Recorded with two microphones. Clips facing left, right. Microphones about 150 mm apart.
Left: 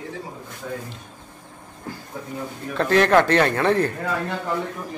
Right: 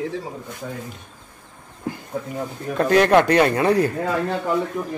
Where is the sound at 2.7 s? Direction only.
15° right (ahead or behind).